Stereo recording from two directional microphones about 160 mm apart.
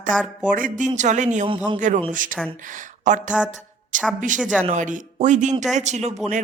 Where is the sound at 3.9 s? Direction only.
50° right (ahead or behind).